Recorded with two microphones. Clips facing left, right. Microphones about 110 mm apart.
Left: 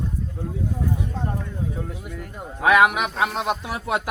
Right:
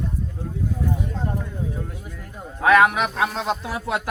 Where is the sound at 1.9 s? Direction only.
70° left (ahead or behind).